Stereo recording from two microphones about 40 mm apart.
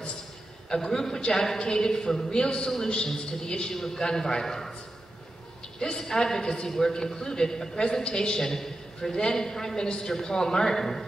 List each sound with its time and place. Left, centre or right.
0.7 s a man's voice: centre
5.8 s a man's voice: centre